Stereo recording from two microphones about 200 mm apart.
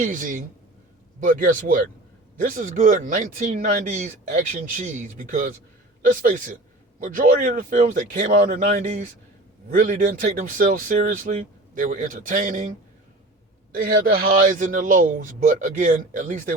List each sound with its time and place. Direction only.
0.0 s a man's voice: 45° right (ahead or behind)
13.7 s a man's voice: 45° right (ahead or behind)